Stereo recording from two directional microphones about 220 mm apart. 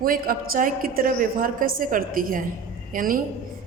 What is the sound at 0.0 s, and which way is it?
A woman's voice, 40° right (ahead or behind).